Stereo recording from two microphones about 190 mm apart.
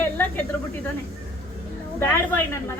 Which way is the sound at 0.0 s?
10° left (ahead or behind).